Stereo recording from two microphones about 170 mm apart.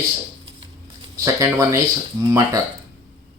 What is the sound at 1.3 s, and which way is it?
Speech, 15° right (ahead or behind).